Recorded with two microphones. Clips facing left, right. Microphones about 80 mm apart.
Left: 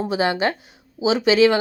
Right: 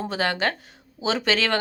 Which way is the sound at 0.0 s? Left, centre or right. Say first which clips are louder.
Left 4 dB; centre.